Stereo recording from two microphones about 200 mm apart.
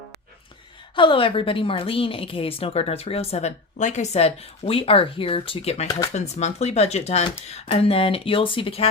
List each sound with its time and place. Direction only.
0.9 s a woman's voice: 25° left (ahead or behind)